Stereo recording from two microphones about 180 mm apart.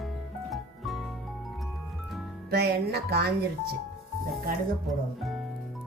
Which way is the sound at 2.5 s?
65° right (ahead or behind).